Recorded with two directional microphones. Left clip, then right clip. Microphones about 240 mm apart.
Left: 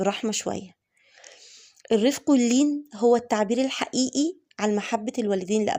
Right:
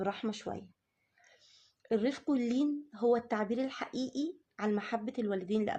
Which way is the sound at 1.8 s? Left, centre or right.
Left.